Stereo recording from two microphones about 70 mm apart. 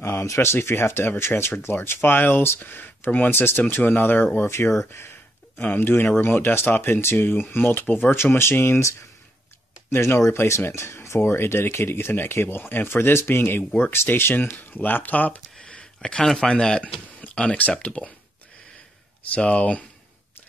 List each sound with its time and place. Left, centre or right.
0.0 s speech: left
5.6 s speech: left
19.3 s speech: centre